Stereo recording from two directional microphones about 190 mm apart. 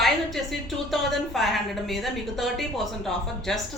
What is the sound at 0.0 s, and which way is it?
Music, centre (ahead or behind).